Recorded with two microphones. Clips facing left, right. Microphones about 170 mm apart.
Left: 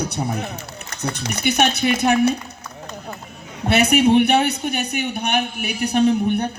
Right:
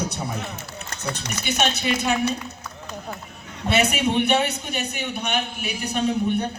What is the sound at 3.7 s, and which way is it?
A man's voice, 60° left (ahead or behind).